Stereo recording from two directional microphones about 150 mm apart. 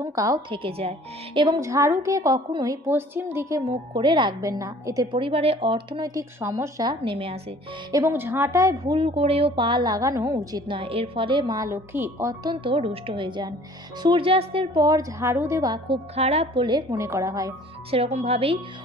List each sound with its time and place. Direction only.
0.0 s a woman's voice: 20° right (ahead or behind)
0.6 s speech: 40° right (ahead or behind)
1.6 s a woman's voice: 20° right (ahead or behind)
5.0 s speech: 35° right (ahead or behind)
7.9 s a woman's voice: 15° right (ahead or behind)
10.7 s a woman's voice: 35° right (ahead or behind); by 12.5 s 20° right (ahead or behind)
12.5 s a woman's voice: 35° right (ahead or behind)
16.2 s speech: 45° right (ahead or behind)
16.6 s a woman's voice: 25° right (ahead or behind)
17.9 s speech: 45° right (ahead or behind)